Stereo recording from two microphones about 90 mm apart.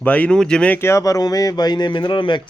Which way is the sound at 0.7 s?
30° left (ahead or behind).